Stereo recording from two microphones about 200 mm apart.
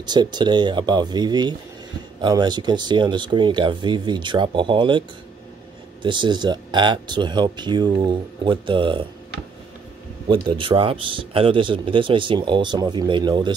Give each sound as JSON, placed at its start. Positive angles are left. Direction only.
{"t": 0.0, "sound": "a man's voice", "side_deg": -20}
{"t": 6.0, "sound": "a man's voice", "side_deg": -25}
{"t": 10.2, "sound": "a man's voice", "side_deg": -25}